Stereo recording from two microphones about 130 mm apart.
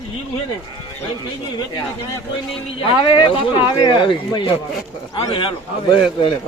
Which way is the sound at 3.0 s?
35° left (ahead or behind).